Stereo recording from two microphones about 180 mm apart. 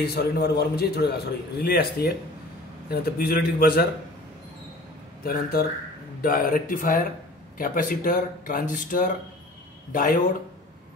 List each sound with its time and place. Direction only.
0.0 s a man's voice: 60° left (ahead or behind)
5.2 s a man's voice: 55° left (ahead or behind)